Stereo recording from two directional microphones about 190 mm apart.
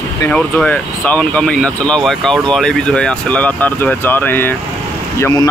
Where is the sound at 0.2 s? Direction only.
5° left (ahead or behind).